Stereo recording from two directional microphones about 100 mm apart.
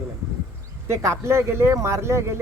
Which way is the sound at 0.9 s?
30° right (ahead or behind).